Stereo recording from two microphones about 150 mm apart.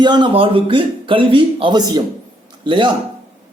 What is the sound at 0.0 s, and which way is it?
A man's voice, 30° right (ahead or behind).